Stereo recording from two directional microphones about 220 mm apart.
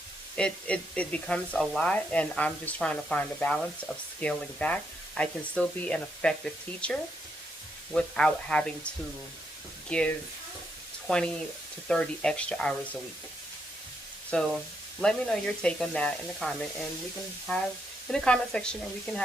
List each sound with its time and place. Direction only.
0.3 s speech: 5° left (ahead or behind)
7.9 s speech: 5° left (ahead or behind)
9.9 s speech: 5° left (ahead or behind)
14.3 s speech: centre (ahead or behind)
18.1 s speech: 5° left (ahead or behind)